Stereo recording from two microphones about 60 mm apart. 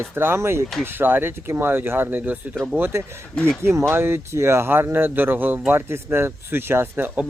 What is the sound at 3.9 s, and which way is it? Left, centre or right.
Speech, right.